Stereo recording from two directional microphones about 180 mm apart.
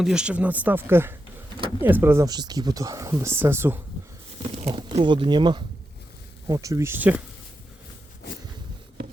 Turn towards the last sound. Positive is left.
turn(degrees=-10)  # may be behind; listen again after turning